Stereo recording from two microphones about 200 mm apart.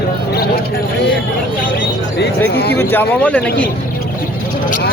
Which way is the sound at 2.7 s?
10° left (ahead or behind).